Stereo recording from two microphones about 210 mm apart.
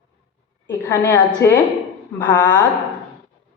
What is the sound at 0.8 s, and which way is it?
A woman's voice, 15° left (ahead or behind).